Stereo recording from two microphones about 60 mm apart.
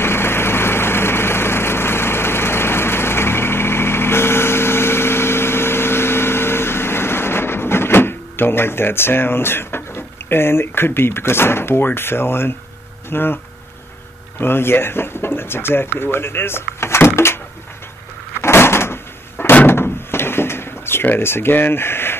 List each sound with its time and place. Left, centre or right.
0.0 s engine: left
13.1 s speech: left
14.4 s speech: left
18.4 s a sound: left
19.5 s door: left